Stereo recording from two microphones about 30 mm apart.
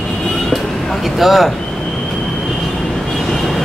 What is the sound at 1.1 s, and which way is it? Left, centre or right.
Speech, centre.